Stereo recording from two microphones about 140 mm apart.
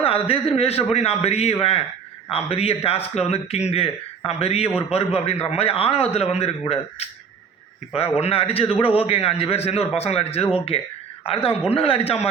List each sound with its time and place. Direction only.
0.0 s a man's voice: 45° left (ahead or behind)
8.2 s a man's voice: 45° left (ahead or behind)